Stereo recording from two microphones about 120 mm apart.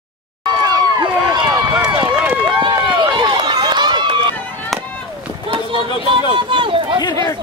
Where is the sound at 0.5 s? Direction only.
30° right (ahead or behind).